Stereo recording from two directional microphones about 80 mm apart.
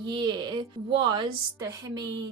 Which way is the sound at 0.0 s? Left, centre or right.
Right.